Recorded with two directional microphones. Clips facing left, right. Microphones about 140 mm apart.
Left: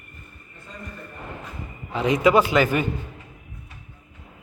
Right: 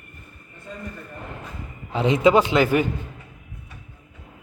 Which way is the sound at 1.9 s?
25° right (ahead or behind).